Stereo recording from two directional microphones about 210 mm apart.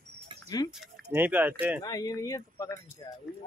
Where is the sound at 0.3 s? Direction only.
25° right (ahead or behind).